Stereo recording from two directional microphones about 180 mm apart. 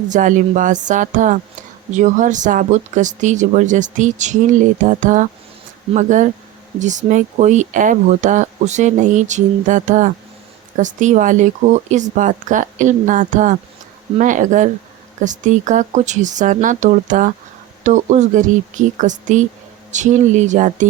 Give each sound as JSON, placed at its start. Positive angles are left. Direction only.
{"t": 0.1, "sound": "speech", "side_deg": -45}